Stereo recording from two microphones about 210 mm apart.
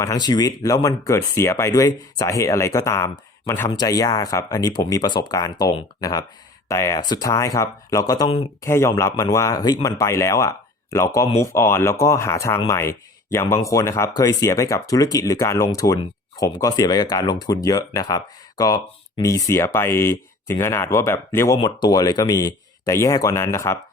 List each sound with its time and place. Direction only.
0.0 s speech: 15° left (ahead or behind)